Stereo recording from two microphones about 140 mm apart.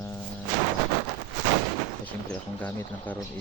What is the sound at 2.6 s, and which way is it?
Speech, 10° left (ahead or behind).